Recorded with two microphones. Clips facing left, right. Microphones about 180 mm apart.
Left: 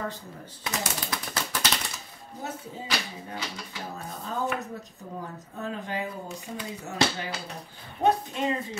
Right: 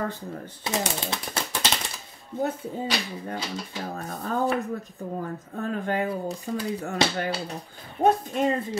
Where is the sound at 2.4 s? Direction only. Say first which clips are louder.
Right 9 dB; 55° right (ahead or behind).